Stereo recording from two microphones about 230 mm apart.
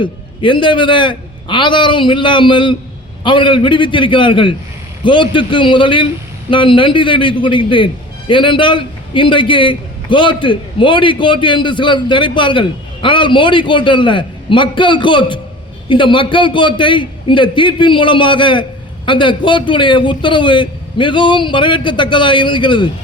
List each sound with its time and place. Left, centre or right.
0.0 s a man's voice: left